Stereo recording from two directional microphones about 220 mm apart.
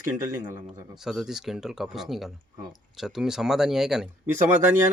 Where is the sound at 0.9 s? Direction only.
Centre (ahead or behind).